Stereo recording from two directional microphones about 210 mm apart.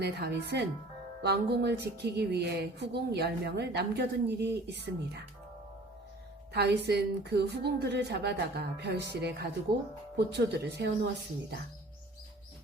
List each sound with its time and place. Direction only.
0.0 s speech: 50° right (ahead or behind)
6.5 s speech: 50° right (ahead or behind)